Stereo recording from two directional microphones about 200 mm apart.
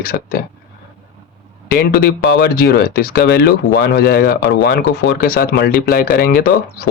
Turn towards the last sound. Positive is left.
turn(degrees=50)  # may be behind; listen again after turning